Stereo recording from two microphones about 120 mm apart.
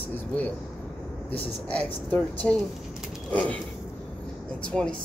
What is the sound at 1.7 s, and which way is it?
Speech, 10° left (ahead or behind).